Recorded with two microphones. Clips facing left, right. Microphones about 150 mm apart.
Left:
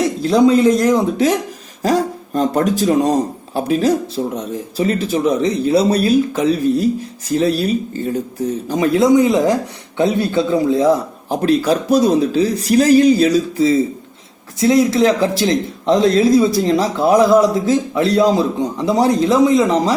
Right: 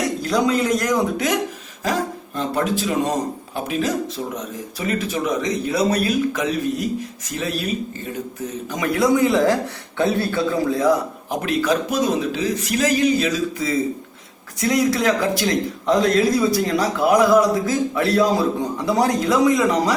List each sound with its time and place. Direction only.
0.0 s a man's voice: 30° left (ahead or behind)